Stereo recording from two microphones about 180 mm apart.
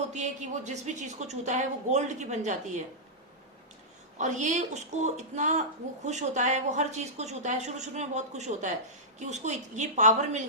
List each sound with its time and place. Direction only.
0.1 s a woman's voice: 40° right (ahead or behind)
4.2 s a woman's voice: 40° right (ahead or behind)